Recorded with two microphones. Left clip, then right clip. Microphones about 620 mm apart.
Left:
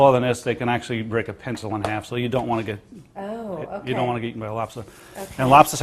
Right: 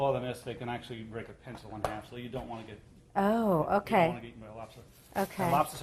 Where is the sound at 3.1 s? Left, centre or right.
Right.